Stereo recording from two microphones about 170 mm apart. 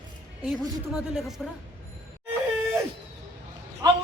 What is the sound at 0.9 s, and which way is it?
Speech, centre (ahead or behind).